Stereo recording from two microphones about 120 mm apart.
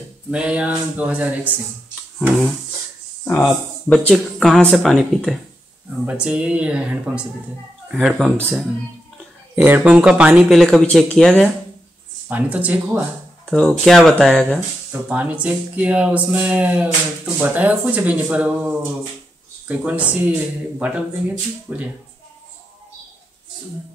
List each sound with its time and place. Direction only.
0.3 s speech: 10° right (ahead or behind)
3.3 s speech: 20° left (ahead or behind)
3.9 s speech: 5° left (ahead or behind)
9.6 s speech: 15° right (ahead or behind); by 11.5 s 5° left (ahead or behind)
12.3 s speech: 10° right (ahead or behind)
13.5 s speech: 5° left (ahead or behind)
14.9 s speech: 10° right (ahead or behind)